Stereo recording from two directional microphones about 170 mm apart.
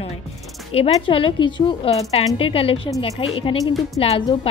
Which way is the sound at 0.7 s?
35° left (ahead or behind).